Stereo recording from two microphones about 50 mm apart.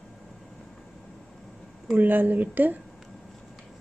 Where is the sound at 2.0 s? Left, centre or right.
Right.